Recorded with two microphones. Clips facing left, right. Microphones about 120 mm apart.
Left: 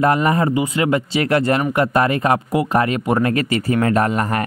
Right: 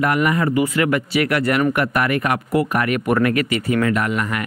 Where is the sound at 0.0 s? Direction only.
30° left (ahead or behind).